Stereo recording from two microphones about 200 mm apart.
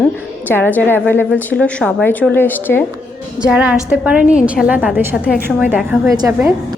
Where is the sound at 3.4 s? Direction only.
5° right (ahead or behind).